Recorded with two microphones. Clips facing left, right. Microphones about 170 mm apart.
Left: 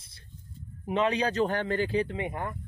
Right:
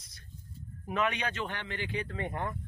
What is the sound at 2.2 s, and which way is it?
Speech, 10° left (ahead or behind).